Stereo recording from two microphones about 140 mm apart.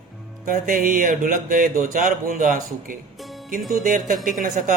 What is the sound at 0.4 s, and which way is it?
Speech, 75° right (ahead or behind).